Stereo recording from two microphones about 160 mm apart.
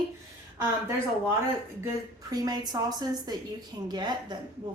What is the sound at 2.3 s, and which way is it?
A woman's voice, 25° right (ahead or behind).